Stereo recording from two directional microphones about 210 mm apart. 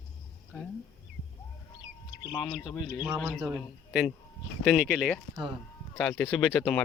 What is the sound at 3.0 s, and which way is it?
Speech, 5° right (ahead or behind).